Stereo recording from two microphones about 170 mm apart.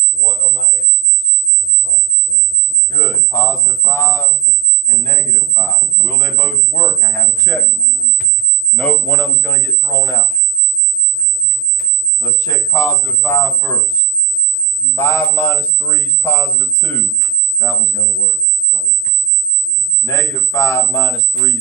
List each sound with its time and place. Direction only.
2.9 s a man's voice: 20° left (ahead or behind)
8.7 s a man's voice: 5° left (ahead or behind)
12.2 s a man's voice: 20° left (ahead or behind)
14.9 s a man's voice: 15° left (ahead or behind)
18.7 s a sound: 75° left (ahead or behind)
20.1 s a man's voice: 15° left (ahead or behind)